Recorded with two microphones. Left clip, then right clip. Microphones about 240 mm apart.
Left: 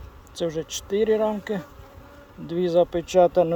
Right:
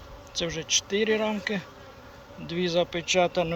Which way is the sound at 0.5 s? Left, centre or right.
Left.